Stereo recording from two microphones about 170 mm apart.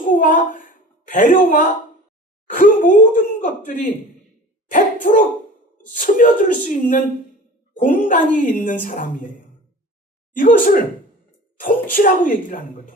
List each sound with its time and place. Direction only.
0.0 s a child's voice: 50° left (ahead or behind)
10.3 s a woman's voice: 55° left (ahead or behind)